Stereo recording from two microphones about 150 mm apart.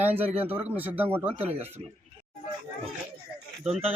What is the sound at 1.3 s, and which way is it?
Speech, 40° right (ahead or behind).